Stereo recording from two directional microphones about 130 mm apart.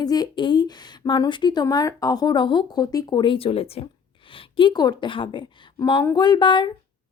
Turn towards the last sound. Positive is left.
turn(degrees=35)  # may be behind; listen again after turning